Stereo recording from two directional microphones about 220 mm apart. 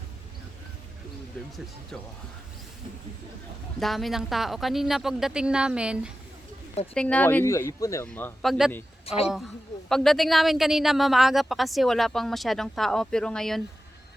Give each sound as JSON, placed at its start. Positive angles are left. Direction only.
{"t": 3.8, "sound": "speech", "side_deg": 0}
{"t": 9.1, "sound": "a woman's voice", "side_deg": 30}
{"t": 9.9, "sound": "speech", "side_deg": 0}